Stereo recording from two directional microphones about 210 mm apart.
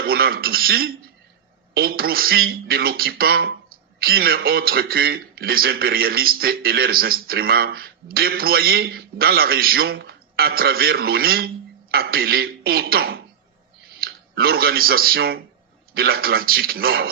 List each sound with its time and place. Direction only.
0.0 s speech: 45° right (ahead or behind)